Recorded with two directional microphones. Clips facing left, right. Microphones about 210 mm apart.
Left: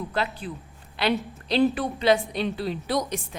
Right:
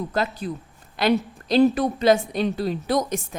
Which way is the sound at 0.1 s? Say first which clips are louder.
Right 3 dB; 40° right (ahead or behind).